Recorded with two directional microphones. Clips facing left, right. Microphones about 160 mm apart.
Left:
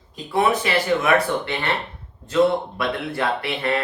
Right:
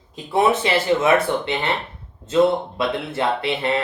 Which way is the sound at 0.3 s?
25° right (ahead or behind).